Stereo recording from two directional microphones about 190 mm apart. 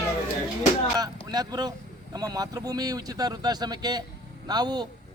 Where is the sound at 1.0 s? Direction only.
20° right (ahead or behind).